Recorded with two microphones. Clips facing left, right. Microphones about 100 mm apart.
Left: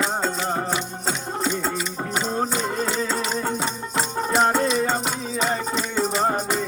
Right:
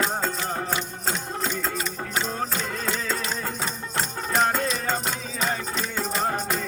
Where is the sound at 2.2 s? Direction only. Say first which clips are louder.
Left 5 dB; 30° left (ahead or behind).